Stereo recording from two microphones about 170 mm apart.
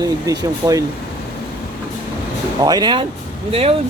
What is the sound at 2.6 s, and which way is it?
Speech, 25° right (ahead or behind).